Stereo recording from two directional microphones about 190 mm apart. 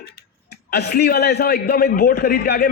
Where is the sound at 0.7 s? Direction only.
60° left (ahead or behind).